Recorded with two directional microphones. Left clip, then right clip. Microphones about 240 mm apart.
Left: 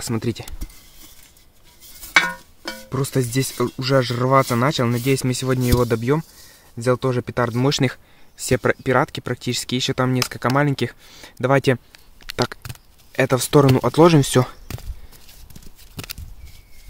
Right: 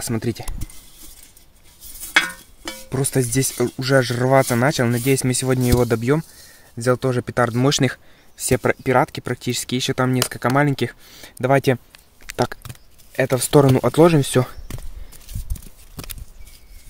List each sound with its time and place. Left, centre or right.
0.0 s speech: centre
2.7 s speech: centre
13.1 s speech: centre